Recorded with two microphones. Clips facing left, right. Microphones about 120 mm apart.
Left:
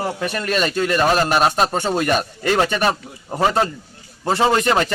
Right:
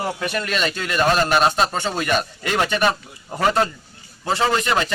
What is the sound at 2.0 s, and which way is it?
Speech, 40° left (ahead or behind).